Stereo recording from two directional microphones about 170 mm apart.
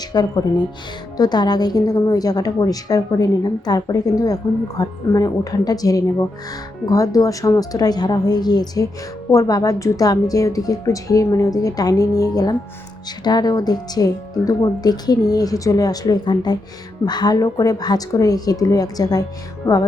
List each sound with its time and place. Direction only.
0.1 s speech: 20° left (ahead or behind)